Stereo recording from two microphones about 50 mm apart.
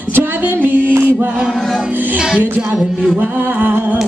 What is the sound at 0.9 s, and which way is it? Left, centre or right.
Mantra, right.